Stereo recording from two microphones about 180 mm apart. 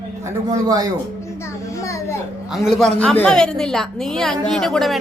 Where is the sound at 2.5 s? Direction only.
Centre (ahead or behind).